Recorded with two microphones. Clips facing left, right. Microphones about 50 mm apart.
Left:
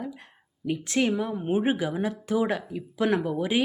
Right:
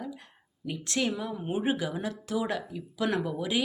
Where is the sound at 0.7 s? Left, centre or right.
Left.